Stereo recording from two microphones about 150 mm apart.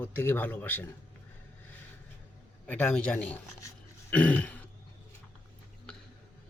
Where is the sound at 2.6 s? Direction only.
10° left (ahead or behind).